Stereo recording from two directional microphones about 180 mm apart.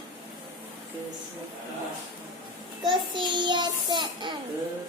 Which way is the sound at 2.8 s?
25° right (ahead or behind).